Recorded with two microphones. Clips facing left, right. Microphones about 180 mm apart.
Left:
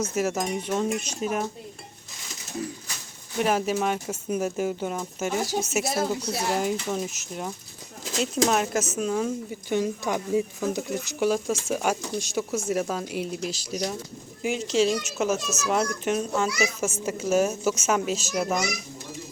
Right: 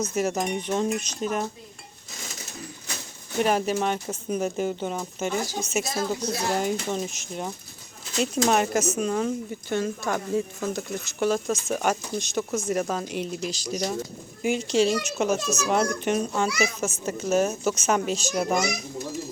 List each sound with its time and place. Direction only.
0.0 s speech: 5° left (ahead or behind)
3.4 s speech: centre (ahead or behind)